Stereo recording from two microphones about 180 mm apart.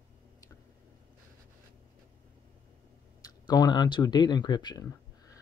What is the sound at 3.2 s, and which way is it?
Speech, 20° left (ahead or behind).